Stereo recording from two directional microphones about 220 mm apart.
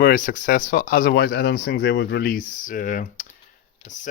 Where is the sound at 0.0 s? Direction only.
40° left (ahead or behind).